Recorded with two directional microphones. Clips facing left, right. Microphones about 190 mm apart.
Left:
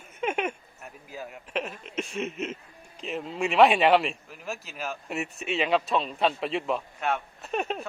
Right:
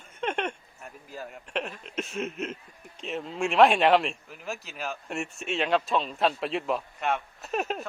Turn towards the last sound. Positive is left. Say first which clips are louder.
# even
turn(degrees=0)  # may be behind; listen again after turning